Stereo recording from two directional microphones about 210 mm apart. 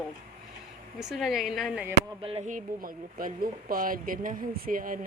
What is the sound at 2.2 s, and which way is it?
Speech, 30° right (ahead or behind).